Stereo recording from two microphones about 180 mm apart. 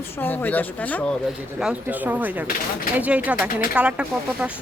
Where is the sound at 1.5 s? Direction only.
5° right (ahead or behind).